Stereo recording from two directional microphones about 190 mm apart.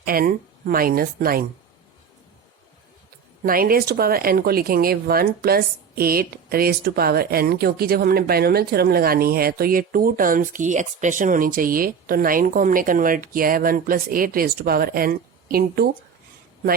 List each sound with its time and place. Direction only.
0.0 s speech: 50° right (ahead or behind)
3.4 s speech: 50° right (ahead or behind)